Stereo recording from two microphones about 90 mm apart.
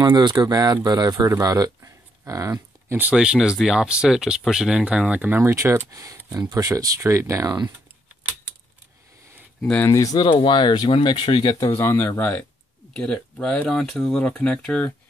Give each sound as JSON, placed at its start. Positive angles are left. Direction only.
{"t": 0.0, "sound": "speech", "side_deg": -55}
{"t": 1.4, "sound": "a sound", "side_deg": -40}
{"t": 2.9, "sound": "speech", "side_deg": -20}
{"t": 5.4, "sound": "speech", "side_deg": -30}
{"t": 9.8, "sound": "speech", "side_deg": 40}
{"t": 10.2, "sound": "speech", "side_deg": 60}
{"t": 11.8, "sound": "speech", "side_deg": 30}
{"t": 12.2, "sound": "speech", "side_deg": 15}